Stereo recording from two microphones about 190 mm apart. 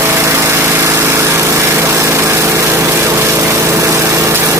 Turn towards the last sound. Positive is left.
turn(degrees=-15)  # may be behind; listen again after turning